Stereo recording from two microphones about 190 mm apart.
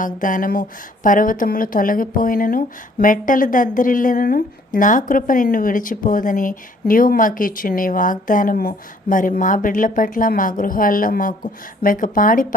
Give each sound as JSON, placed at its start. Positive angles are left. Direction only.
{"t": 0.0, "sound": "speech", "side_deg": 45}